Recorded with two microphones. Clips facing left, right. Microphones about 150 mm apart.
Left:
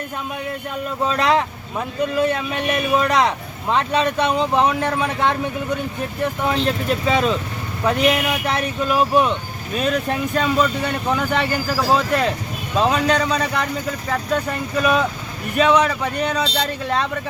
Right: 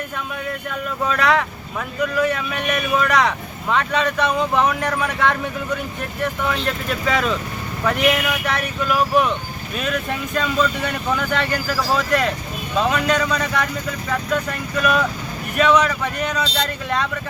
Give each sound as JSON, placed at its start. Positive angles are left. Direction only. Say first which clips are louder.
{"t": 1.0, "sound": "a man's voice", "louder": "left 1 dB", "side_deg": 25}
{"t": 6.4, "sound": "a man's voice", "louder": "left 3 dB", "side_deg": 25}
{"t": 14.8, "sound": "a man's voice", "louder": "left 1 dB", "side_deg": 25}